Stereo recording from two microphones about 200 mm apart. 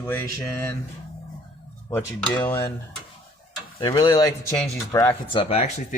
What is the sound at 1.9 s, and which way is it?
Speech, 5° left (ahead or behind).